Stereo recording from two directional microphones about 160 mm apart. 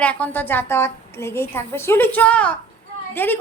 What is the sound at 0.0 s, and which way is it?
A woman's voice, 10° left (ahead or behind).